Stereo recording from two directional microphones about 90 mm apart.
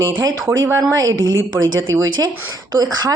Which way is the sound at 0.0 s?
55° right (ahead or behind).